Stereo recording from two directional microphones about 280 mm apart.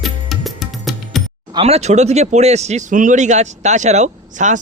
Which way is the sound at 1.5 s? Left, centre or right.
Right.